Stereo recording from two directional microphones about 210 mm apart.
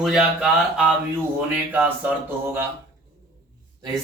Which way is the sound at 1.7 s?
10° right (ahead or behind).